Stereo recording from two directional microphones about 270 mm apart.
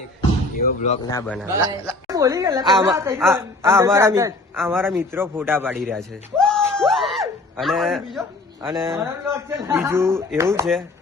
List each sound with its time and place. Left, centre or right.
0.5 s speech: left
1.1 s a man's voice: centre
1.5 s a man's voice: centre